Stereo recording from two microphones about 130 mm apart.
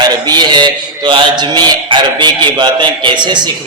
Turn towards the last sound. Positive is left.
turn(degrees=-35)  # may be behind; listen again after turning